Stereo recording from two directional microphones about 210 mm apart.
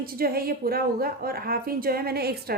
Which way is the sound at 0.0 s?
45° right (ahead or behind).